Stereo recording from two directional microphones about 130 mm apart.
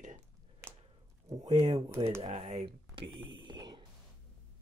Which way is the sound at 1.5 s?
40° right (ahead or behind).